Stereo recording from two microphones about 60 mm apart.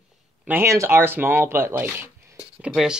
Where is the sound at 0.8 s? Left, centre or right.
Right.